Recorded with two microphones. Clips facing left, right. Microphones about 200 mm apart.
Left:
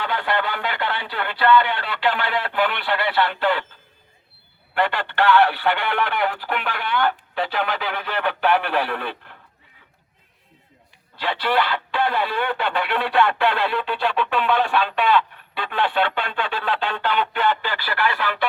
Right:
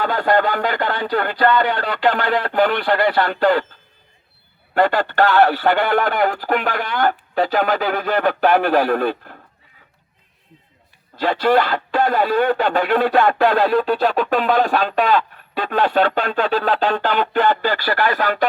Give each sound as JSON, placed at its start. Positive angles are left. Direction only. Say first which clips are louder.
{"t": 0.0, "sound": "speech", "louder": "right 7 dB", "side_deg": -40}
{"t": 11.2, "sound": "speech", "louder": "right 6 dB", "side_deg": -45}